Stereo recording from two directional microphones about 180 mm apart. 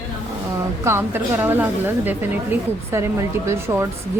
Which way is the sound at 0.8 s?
15° right (ahead or behind).